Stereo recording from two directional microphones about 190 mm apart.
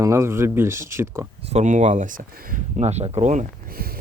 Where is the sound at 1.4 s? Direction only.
35° right (ahead or behind).